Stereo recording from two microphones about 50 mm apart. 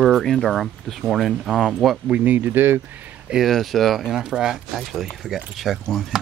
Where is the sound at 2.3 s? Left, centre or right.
Right.